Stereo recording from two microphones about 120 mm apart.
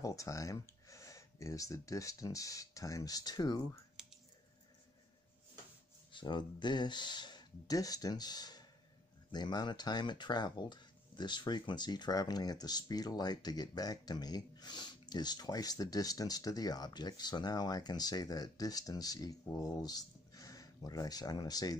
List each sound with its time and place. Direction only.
0.0 s speech: 25° left (ahead or behind)
6.1 s speech: 40° left (ahead or behind)